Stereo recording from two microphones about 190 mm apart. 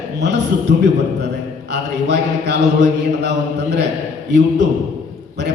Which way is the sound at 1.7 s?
65° right (ahead or behind).